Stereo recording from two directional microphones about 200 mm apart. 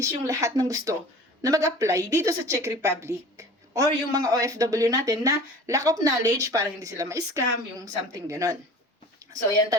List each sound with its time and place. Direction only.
0.0 s a woman's voice: 15° right (ahead or behind)